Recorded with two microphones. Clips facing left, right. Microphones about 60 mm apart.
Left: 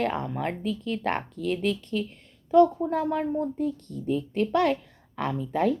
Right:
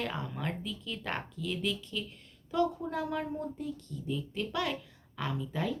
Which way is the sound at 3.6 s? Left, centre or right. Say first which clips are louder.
Left 9 dB; left.